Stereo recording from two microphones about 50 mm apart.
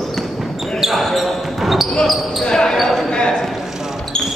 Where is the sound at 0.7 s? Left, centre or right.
Centre.